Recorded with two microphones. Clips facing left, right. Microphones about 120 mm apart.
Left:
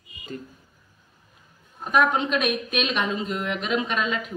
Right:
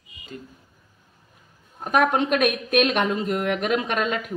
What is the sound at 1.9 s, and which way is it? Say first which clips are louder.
A woman's voice: right 2 dB; 55° right (ahead or behind).